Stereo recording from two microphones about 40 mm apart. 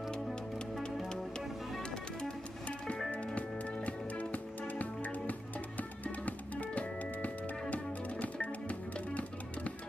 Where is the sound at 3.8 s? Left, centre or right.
Left.